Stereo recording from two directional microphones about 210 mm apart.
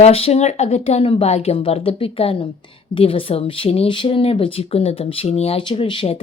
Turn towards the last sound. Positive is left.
turn(degrees=25)  # may be behind; listen again after turning